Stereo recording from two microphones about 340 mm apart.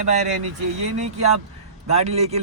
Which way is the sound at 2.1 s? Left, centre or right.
Centre.